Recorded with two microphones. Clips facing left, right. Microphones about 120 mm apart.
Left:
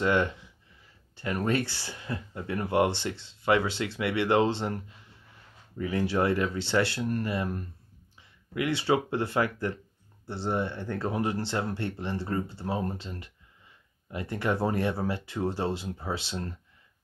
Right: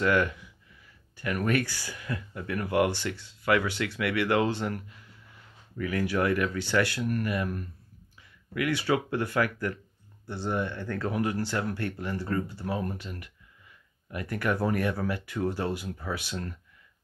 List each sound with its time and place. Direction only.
0.0 s speech: 25° left (ahead or behind)